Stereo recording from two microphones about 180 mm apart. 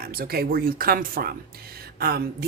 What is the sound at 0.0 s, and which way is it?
A woman's voice, 55° right (ahead or behind).